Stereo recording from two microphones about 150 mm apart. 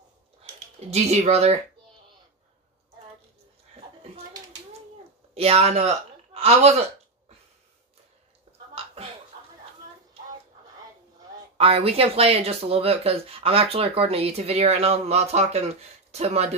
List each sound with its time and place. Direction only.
0.4 s speech: 45° right (ahead or behind)
5.3 s a man's voice: 45° right (ahead or behind)
8.7 s a sound: 40° right (ahead or behind)
11.5 s speech: 40° right (ahead or behind)